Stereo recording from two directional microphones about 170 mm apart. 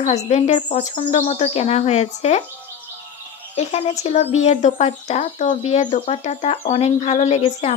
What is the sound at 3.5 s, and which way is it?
Speech, 40° left (ahead or behind).